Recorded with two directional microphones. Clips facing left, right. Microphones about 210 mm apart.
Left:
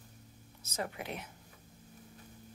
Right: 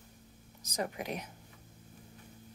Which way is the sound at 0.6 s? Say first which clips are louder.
Right 3 dB; 15° right (ahead or behind).